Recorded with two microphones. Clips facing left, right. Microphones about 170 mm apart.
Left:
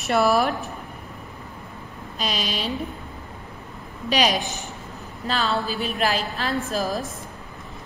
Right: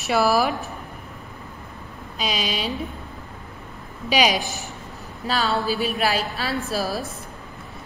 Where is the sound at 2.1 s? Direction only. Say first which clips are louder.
Right 1 dB; centre (ahead or behind).